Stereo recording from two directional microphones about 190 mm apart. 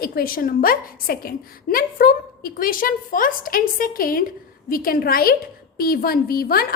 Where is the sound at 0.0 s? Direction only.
50° left (ahead or behind).